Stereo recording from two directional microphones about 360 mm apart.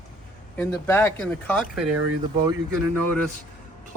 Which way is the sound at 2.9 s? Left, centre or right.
Right.